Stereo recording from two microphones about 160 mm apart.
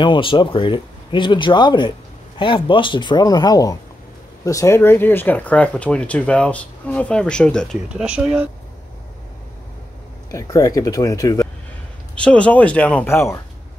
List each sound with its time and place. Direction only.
0.0 s speech: 30° left (ahead or behind); by 7.7 s 5° left (ahead or behind)
7.9 s speech: 5° right (ahead or behind)
10.3 s speech: 20° left (ahead or behind)
12.2 s speech: 10° left (ahead or behind)